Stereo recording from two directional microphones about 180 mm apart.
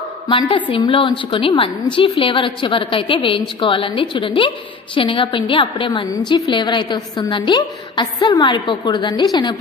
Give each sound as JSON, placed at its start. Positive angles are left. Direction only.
{"t": 0.3, "sound": "a woman's voice", "side_deg": 30}